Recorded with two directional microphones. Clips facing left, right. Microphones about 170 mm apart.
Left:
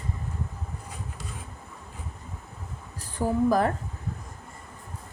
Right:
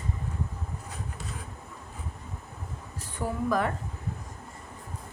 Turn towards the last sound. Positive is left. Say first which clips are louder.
# left 5 dB
turn(degrees=35)  # may be behind; listen again after turning